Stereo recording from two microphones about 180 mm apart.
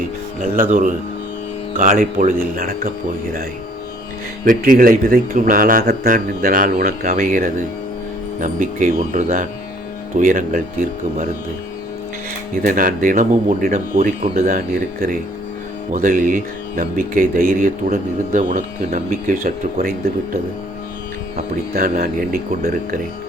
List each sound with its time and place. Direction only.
0.5 s speech: 45° right (ahead or behind)
4.4 s speech: 50° right (ahead or behind)
12.6 s speech: 50° right (ahead or behind)
15.9 s speech: 50° right (ahead or behind)
21.5 s speech: 50° right (ahead or behind)